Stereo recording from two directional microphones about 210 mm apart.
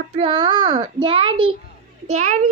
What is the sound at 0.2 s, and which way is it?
Speech, 20° right (ahead or behind).